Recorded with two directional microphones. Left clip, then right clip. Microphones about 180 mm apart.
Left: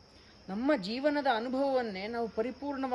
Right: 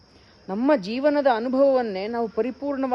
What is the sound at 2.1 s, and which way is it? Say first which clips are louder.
Speech: right 7 dB; 45° right (ahead or behind).